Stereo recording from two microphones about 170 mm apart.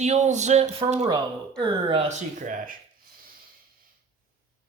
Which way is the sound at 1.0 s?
25° right (ahead or behind).